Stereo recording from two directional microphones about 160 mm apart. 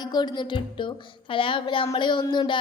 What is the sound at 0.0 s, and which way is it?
A woman's voice, 25° left (ahead or behind).